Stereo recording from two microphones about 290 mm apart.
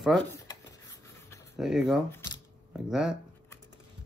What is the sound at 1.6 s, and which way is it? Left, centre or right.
Speech, centre.